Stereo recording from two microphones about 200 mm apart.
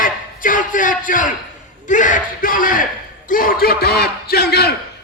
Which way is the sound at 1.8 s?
40° left (ahead or behind).